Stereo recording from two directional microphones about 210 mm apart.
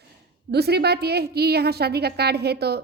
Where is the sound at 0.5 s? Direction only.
50° right (ahead or behind).